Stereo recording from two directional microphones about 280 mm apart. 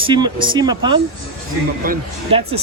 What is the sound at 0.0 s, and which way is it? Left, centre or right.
Speech, centre.